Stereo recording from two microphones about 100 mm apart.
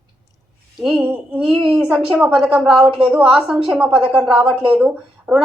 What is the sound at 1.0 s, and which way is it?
Speech, 15° right (ahead or behind).